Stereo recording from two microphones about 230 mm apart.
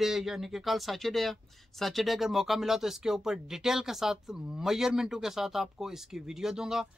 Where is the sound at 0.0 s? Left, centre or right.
Centre.